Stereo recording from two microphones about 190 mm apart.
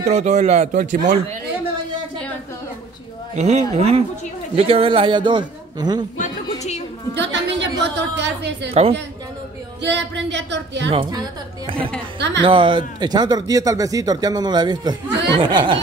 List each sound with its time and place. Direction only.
0.0 s speech: 35° right (ahead or behind)
3.3 s a man's voice: 35° right (ahead or behind)
6.1 s a sound: 40° left (ahead or behind)
7.2 s a woman's voice: 70° right (ahead or behind)
9.8 s a woman's voice: 65° right (ahead or behind)
10.9 s a man's voice: 25° right (ahead or behind)
12.2 s speech: 65° right (ahead or behind)
12.4 s a man's voice: 25° right (ahead or behind)